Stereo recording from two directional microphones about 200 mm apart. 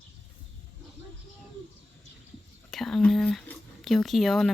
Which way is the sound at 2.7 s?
Centre (ahead or behind).